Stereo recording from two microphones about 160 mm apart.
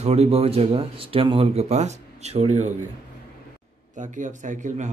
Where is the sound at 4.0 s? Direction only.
50° right (ahead or behind).